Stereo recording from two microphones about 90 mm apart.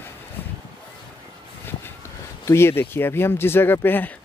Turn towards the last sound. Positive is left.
turn(degrees=20)  # may be behind; listen again after turning